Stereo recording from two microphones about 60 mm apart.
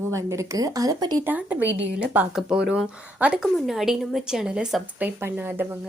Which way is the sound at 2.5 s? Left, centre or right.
Centre.